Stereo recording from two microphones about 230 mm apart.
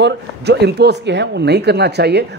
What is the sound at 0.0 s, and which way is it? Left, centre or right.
Speech, right.